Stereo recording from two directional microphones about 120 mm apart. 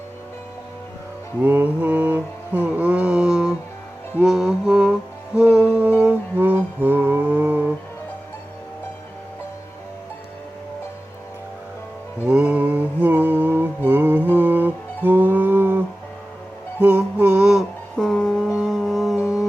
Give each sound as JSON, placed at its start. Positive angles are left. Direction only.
{"t": 1.4, "sound": "mantra", "side_deg": -20}
{"t": 4.2, "sound": "music", "side_deg": -5}
{"t": 12.2, "sound": "mantra", "side_deg": -10}
{"t": 14.3, "sound": "music", "side_deg": -15}
{"t": 16.8, "sound": "music", "side_deg": -10}